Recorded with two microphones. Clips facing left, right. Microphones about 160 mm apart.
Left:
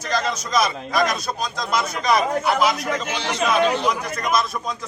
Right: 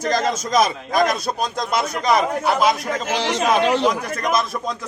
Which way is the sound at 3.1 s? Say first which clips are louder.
Right 4 dB; 90° right.